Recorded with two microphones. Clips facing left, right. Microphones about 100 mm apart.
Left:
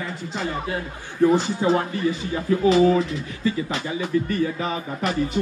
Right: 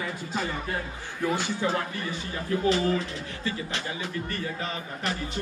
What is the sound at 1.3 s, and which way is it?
Speech, 35° left (ahead or behind).